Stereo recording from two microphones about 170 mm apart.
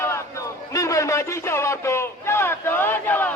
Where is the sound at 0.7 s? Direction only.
20° left (ahead or behind).